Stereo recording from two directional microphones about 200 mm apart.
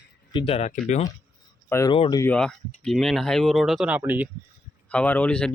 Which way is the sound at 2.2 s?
5° left (ahead or behind).